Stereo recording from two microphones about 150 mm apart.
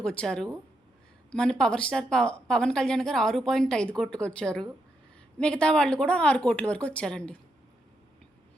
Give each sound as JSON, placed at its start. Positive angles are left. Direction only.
{"t": 0.0, "sound": "speech", "side_deg": 5}